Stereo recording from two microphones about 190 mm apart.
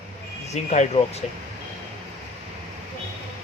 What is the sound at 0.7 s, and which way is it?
Speech, 35° left (ahead or behind).